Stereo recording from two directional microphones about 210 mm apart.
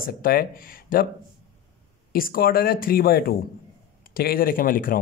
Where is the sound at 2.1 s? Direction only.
45° left (ahead or behind).